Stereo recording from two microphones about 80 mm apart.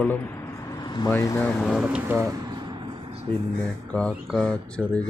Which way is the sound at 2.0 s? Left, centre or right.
Right.